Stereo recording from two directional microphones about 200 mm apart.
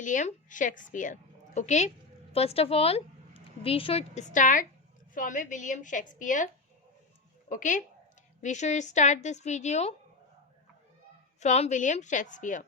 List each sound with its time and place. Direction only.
0.0 s a woman's voice: 40° left (ahead or behind)
7.5 s a woman's voice: 40° left (ahead or behind)
11.3 s a woman's voice: 35° left (ahead or behind)